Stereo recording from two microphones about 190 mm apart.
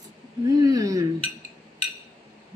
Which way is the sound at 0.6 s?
20° right (ahead or behind).